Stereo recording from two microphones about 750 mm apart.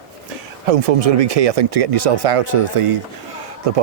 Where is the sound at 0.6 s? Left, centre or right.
Right.